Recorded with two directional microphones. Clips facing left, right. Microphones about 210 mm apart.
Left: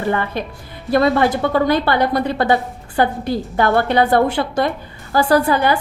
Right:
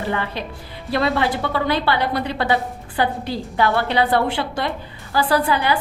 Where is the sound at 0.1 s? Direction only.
50° left (ahead or behind).